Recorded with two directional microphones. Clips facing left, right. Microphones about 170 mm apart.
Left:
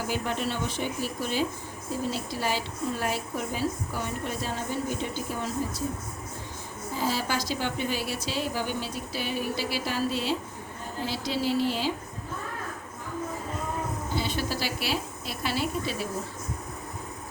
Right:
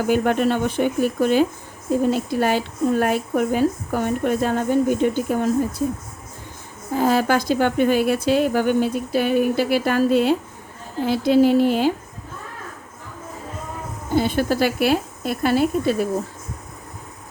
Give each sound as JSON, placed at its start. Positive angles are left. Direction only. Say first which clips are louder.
{"t": 0.0, "sound": "a woman's voice", "louder": "right 11 dB", "side_deg": -55}
{"t": 6.9, "sound": "a woman's voice", "louder": "right 11 dB", "side_deg": -55}
{"t": 14.1, "sound": "a woman's voice", "louder": "right 13 dB", "side_deg": -50}